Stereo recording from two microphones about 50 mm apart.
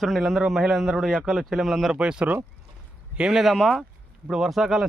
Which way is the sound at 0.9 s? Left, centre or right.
Centre.